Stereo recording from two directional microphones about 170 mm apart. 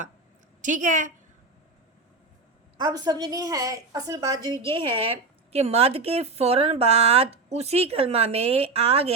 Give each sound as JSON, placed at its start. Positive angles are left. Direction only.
{"t": 0.6, "sound": "a woman's voice", "side_deg": -50}
{"t": 2.7, "sound": "a woman's voice", "side_deg": -25}
{"t": 4.6, "sound": "a woman's voice", "side_deg": -30}